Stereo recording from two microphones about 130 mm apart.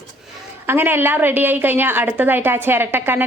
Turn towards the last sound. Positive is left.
turn(degrees=-15)  # may be behind; listen again after turning